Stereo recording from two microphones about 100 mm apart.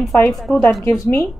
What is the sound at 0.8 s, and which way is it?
Speech, 30° left (ahead or behind).